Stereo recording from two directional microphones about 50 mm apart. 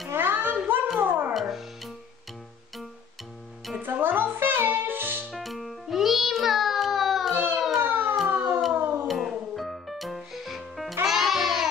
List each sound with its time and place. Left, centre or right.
0.1 s a sound: right
1.3 s music: centre
3.8 s music: right
5.3 s music: centre
7.8 s siren: right
8.7 s music: right
9.0 s music: centre